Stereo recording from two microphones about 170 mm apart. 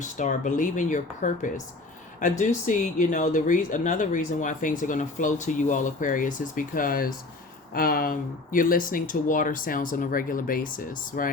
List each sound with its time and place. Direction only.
0.0 s speech: 45° left (ahead or behind)